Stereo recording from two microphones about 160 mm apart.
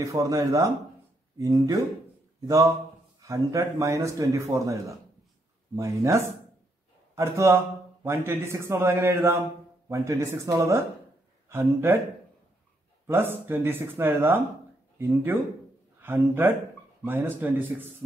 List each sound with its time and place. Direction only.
0.0 s a man's voice: 20° right (ahead or behind)
13.0 s a man's voice: 15° right (ahead or behind)
16.0 s a man's voice: 10° right (ahead or behind)